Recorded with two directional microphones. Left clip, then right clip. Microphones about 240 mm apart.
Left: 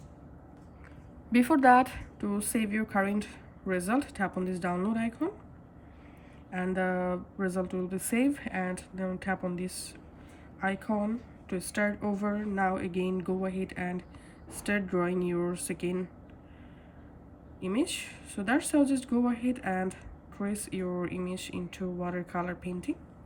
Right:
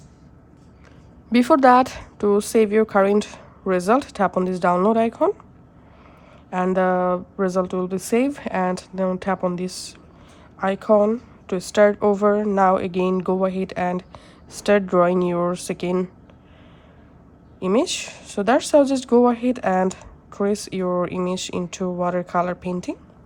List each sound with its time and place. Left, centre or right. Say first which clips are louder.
1.3 s speech: right 8 dB; centre
6.5 s speech: right 12 dB; centre
17.6 s speech: right 12 dB; centre